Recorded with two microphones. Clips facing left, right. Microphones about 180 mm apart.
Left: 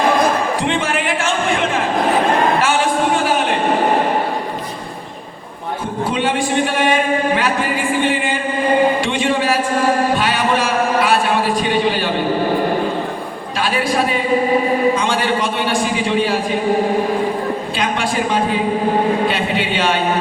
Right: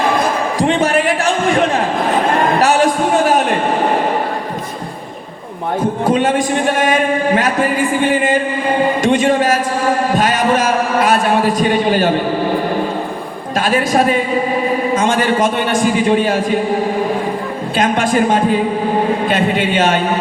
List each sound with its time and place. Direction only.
0.6 s a man's voice: 40° right (ahead or behind)
2.6 s a sound: 40° right (ahead or behind)
6.1 s speech: 45° right (ahead or behind)
9.0 s a sound: 45° right (ahead or behind)
10.2 s a man's voice: 45° right (ahead or behind)
13.6 s a man's voice: 45° right (ahead or behind)
17.7 s a man's voice: 45° right (ahead or behind)